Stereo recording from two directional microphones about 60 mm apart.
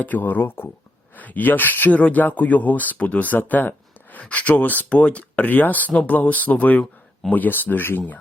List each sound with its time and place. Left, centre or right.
0.0 s speech: left